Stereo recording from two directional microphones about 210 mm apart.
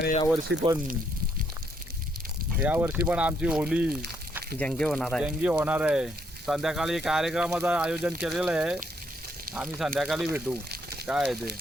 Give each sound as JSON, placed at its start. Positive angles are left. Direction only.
{"t": 0.5, "sound": "speech", "side_deg": -55}
{"t": 2.6, "sound": "speech", "side_deg": -10}